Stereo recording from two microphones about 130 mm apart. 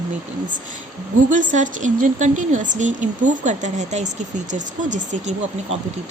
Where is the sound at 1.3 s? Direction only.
80° right.